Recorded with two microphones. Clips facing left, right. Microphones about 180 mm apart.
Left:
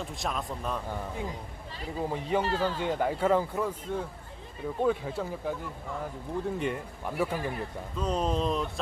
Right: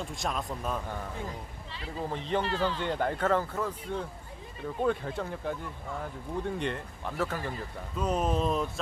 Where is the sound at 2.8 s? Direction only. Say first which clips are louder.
Left 2 dB; 5° left (ahead or behind).